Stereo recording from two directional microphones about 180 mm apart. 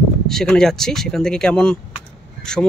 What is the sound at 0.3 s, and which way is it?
Speech, 5° left (ahead or behind).